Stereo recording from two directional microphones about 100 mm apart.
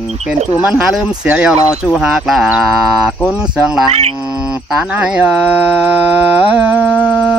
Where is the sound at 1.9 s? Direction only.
5° right (ahead or behind).